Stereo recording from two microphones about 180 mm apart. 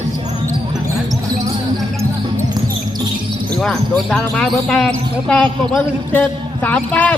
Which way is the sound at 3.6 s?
Centre (ahead or behind).